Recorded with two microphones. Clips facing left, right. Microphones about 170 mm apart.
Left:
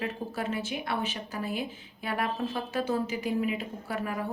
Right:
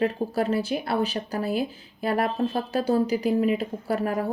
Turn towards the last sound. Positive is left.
turn(degrees=-40)  # may be behind; listen again after turning